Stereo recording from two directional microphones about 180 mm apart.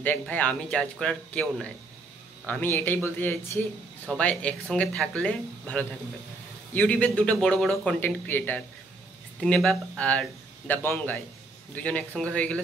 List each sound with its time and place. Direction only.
0.0 s speech: 10° left (ahead or behind)